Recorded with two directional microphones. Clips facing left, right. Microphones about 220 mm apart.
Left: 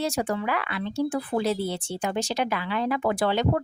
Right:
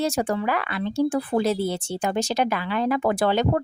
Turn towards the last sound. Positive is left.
turn(degrees=-45)  # may be behind; listen again after turning